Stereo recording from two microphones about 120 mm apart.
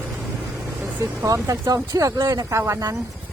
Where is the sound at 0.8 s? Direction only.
25° right (ahead or behind).